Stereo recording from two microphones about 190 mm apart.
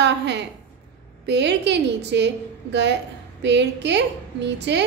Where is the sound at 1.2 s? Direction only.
65° right (ahead or behind).